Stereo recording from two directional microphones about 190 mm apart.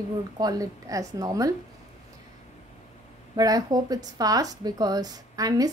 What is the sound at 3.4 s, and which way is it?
Speech, 20° right (ahead or behind).